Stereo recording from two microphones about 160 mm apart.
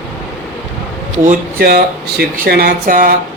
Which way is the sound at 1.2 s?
60° right (ahead or behind).